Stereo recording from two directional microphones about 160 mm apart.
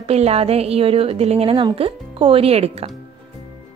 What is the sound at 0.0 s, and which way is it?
A woman's voice, 40° right (ahead or behind).